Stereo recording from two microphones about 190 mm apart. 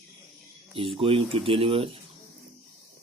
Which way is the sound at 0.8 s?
30° right (ahead or behind).